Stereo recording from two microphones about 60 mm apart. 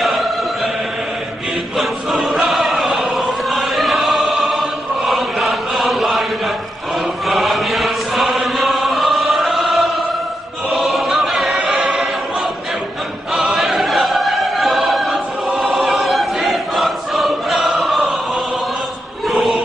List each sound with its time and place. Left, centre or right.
1.8 s choir: centre
7.2 s chant: centre
10.7 s choir: centre
13.3 s choir: centre
19.2 s chant: centre